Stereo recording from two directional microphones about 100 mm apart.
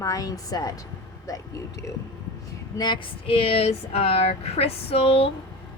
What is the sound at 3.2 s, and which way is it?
A woman's voice, 70° left (ahead or behind).